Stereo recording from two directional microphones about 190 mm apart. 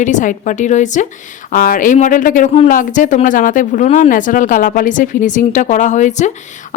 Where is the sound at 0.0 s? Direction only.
40° left (ahead or behind).